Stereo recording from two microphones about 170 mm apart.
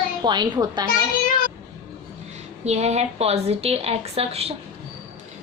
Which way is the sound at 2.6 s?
40° right (ahead or behind).